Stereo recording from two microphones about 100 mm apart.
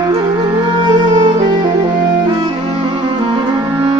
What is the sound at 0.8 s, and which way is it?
Music, 50° right (ahead or behind).